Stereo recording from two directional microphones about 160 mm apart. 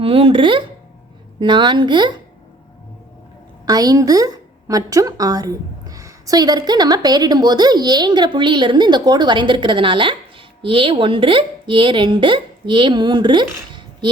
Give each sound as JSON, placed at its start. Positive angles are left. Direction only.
{"t": 0.0, "sound": "a woman's voice", "side_deg": -35}
{"t": 3.7, "sound": "a woman's voice", "side_deg": -25}